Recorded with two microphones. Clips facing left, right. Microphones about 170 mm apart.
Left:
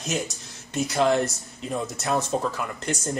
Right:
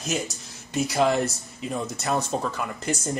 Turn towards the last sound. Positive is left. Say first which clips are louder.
# right 1 dB
turn(degrees=0)  # may be behind; listen again after turning